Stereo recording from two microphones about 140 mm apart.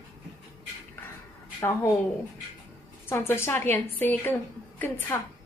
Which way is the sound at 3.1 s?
15° left (ahead or behind).